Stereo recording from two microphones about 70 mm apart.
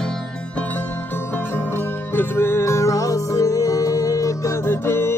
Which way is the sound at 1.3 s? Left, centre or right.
Left.